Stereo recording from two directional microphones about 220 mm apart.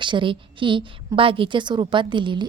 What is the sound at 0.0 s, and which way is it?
A woman's voice, 20° right (ahead or behind).